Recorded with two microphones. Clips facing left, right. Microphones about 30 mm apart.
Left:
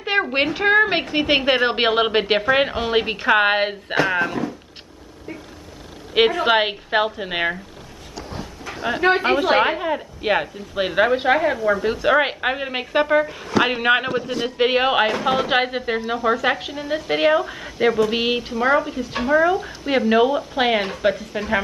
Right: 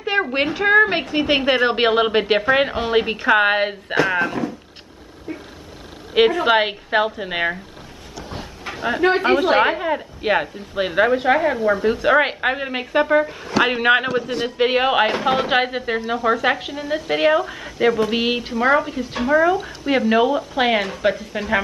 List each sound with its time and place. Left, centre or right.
0.1 s a sound: centre
0.6 s a woman's voice: centre
6.1 s speech: centre
8.8 s speech: centre